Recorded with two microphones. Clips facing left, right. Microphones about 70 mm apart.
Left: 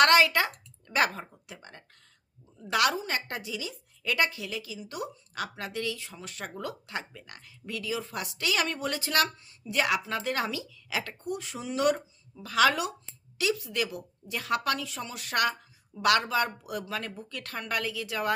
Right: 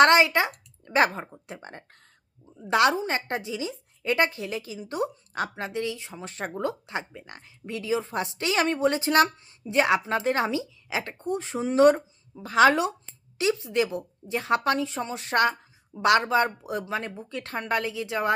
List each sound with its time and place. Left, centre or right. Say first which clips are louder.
0.0 s speech: right 3 dB; right